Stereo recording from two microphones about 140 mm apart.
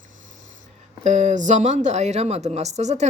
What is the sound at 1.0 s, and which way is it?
Speech, 55° right (ahead or behind).